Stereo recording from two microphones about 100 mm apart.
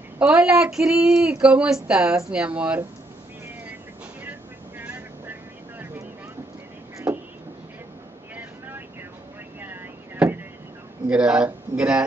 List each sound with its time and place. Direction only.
0.2 s speech: 10° right (ahead or behind)
4.2 s vehicle: 20° right (ahead or behind)
7.1 s vehicle: 10° right (ahead or behind)
9.6 s a sound: 15° right (ahead or behind)
11.1 s speech: 10° right (ahead or behind)